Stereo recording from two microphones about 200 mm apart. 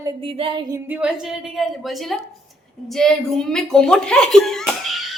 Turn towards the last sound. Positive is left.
turn(degrees=0)  # may be behind; listen again after turning